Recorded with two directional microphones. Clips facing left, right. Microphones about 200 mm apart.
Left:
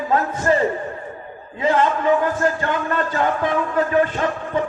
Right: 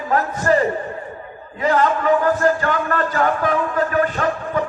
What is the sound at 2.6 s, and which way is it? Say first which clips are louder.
A man's voice: right 1 dB; 20° left (ahead or behind).